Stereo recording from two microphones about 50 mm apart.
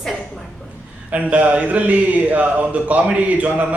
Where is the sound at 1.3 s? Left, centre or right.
Right.